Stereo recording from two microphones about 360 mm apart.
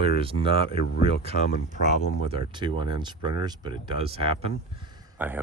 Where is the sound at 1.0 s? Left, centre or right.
Centre.